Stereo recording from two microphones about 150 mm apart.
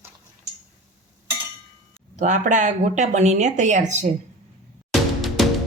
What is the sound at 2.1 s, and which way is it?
Speech, 55° right (ahead or behind).